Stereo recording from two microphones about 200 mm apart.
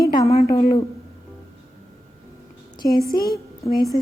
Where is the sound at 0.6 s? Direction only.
30° left (ahead or behind).